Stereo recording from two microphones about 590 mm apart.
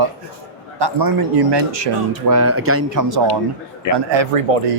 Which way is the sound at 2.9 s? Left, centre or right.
Right.